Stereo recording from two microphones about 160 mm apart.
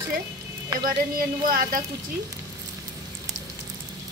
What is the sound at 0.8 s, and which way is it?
A woman's voice, 65° right (ahead or behind).